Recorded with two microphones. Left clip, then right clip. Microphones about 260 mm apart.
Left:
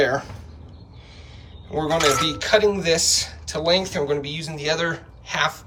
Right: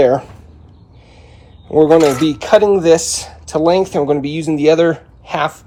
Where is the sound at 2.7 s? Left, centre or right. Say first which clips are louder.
Right 9 dB; centre.